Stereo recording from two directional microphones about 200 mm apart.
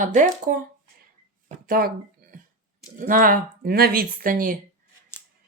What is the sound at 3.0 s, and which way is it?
Speech, 45° right (ahead or behind).